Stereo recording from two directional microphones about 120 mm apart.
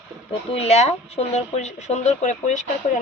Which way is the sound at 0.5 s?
60° left (ahead or behind).